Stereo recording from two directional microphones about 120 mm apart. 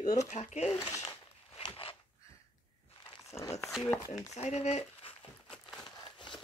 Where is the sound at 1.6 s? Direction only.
45° left (ahead or behind).